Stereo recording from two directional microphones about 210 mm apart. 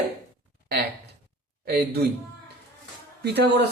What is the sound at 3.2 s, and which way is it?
Speech, 55° right (ahead or behind).